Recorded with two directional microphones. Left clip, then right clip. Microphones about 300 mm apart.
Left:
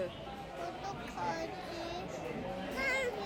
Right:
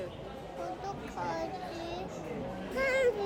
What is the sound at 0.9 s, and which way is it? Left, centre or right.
Speech, centre.